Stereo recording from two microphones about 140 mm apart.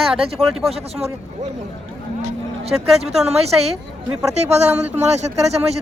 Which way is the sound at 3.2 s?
50° right (ahead or behind).